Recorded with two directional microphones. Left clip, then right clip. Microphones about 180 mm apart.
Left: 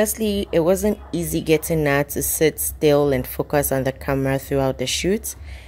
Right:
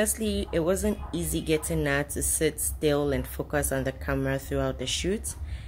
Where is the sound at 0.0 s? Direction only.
35° left (ahead or behind).